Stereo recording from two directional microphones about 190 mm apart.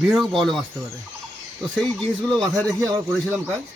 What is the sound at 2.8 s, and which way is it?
Speech, 15° right (ahead or behind).